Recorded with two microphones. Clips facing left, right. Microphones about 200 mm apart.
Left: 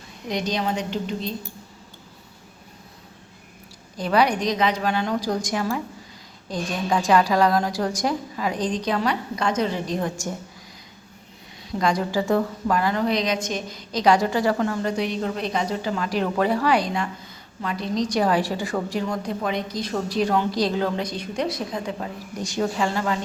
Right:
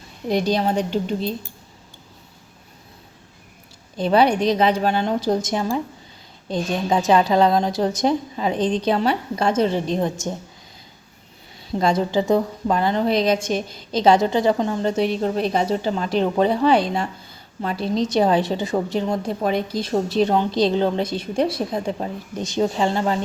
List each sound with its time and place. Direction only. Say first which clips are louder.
0.3 s a woman's voice: right 5 dB; 30° right (ahead or behind)
3.9 s a woman's voice: right 4 dB; 25° right (ahead or behind)
11.7 s a woman's voice: right 3 dB; 25° right (ahead or behind)